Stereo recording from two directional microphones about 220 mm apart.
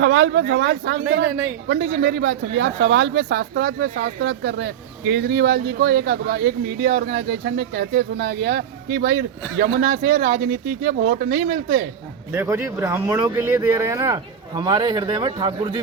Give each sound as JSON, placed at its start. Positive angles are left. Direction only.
{"t": 0.0, "sound": "speech", "side_deg": -60}
{"t": 0.4, "sound": "speech", "side_deg": -50}
{"t": 12.3, "sound": "speech", "side_deg": -10}